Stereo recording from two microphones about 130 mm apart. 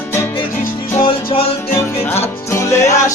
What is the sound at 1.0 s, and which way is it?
Music, 45° left (ahead or behind).